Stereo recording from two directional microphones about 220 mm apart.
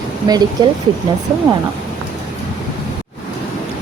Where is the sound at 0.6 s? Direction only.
20° right (ahead or behind).